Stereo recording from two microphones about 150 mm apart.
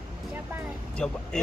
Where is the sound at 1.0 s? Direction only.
5° left (ahead or behind).